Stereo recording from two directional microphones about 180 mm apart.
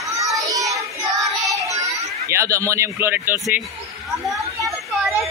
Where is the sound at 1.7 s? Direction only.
15° right (ahead or behind).